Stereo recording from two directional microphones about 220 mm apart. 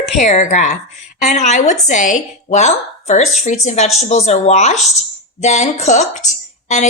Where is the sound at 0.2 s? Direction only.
30° left (ahead or behind).